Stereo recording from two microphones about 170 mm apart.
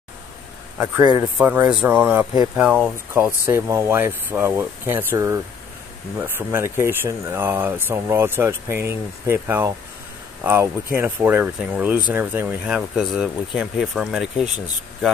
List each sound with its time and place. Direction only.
1.4 s speech: 10° right (ahead or behind)